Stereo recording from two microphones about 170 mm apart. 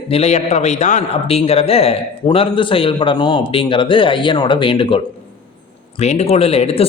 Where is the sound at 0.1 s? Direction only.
40° left (ahead or behind).